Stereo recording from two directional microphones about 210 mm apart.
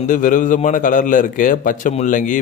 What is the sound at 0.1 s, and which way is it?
A man's voice, 40° left (ahead or behind).